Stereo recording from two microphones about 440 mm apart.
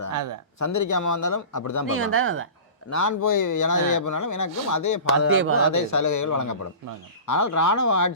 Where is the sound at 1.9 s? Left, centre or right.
Right.